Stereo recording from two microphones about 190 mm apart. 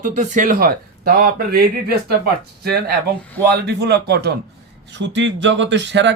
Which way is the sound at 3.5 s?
60° right (ahead or behind).